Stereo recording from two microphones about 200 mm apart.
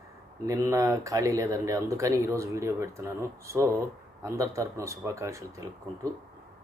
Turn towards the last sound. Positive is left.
turn(degrees=-15)  # may be behind; listen again after turning